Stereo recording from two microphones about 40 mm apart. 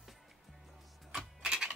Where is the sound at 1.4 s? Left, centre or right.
Right.